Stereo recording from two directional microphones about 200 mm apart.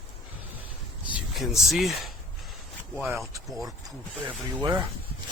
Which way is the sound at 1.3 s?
Centre (ahead or behind).